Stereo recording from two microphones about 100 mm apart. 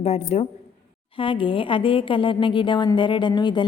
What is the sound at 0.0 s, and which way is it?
Speech, 90° left.